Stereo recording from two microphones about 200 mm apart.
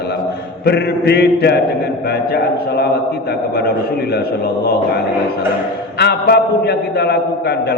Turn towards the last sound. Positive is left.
turn(degrees=55)  # may be behind; listen again after turning